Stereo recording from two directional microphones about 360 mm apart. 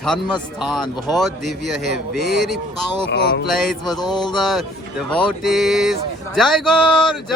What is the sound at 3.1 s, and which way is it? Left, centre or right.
Male singing, left.